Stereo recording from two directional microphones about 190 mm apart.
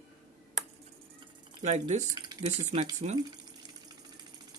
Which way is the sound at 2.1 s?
20° right (ahead or behind).